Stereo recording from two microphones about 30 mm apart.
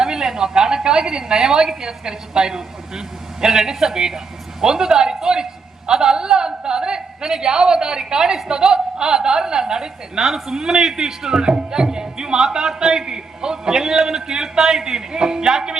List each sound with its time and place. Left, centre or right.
0.0 s a man's voice: right